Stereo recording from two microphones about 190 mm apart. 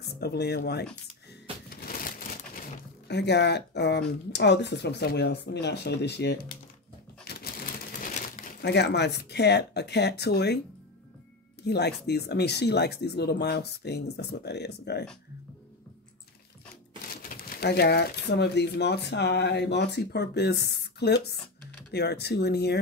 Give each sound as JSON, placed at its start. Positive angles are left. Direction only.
{"t": 0.2, "sound": "speech", "side_deg": 55}
{"t": 1.9, "sound": "a sound", "side_deg": 50}
{"t": 4.3, "sound": "speech", "side_deg": 65}
{"t": 7.3, "sound": "a sound", "side_deg": 55}
{"t": 8.1, "sound": "crumpling", "side_deg": 40}
{"t": 8.6, "sound": "speech", "side_deg": 60}
{"t": 11.6, "sound": "speech", "side_deg": 60}
{"t": 17.1, "sound": "speech", "side_deg": 50}